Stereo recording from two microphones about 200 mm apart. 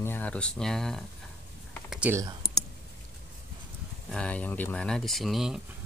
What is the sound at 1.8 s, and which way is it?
Typing, 5° right (ahead or behind).